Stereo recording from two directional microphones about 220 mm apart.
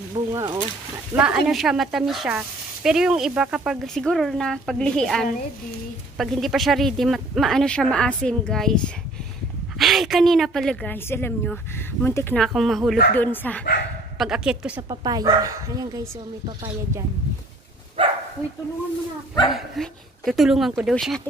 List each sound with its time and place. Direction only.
0.3 s speech: 20° right (ahead or behind)
1.1 s speech: 5° right (ahead or behind)
12.4 s speech: centre (ahead or behind)
14.1 s speech: centre (ahead or behind)
14.9 s speech: 15° right (ahead or behind)
18.0 s bow-wow: 25° right (ahead or behind)
19.5 s speech: centre (ahead or behind)